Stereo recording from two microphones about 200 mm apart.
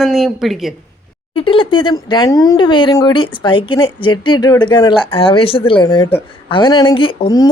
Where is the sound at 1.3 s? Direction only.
25° left (ahead or behind).